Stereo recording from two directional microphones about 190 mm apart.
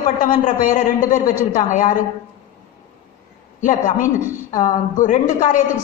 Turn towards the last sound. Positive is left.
turn(degrees=40)  # may be behind; listen again after turning